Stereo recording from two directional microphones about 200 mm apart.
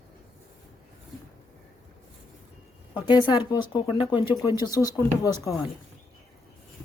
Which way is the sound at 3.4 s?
20° left (ahead or behind).